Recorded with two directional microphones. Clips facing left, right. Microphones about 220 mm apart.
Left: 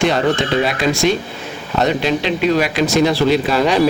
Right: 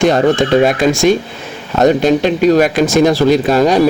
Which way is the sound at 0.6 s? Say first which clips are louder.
Right 5 dB; 50° right (ahead or behind).